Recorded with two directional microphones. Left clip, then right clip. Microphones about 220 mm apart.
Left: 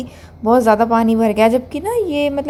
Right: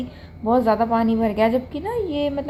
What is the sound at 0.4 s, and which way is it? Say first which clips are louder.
A woman's voice: left 6 dB; 30° left (ahead or behind).